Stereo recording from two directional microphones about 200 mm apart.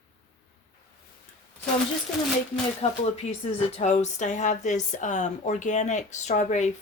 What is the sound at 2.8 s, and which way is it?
A woman's voice, 30° left (ahead or behind).